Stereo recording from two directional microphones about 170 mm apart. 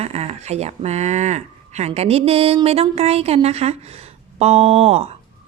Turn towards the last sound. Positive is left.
turn(degrees=-35)  # may be behind; listen again after turning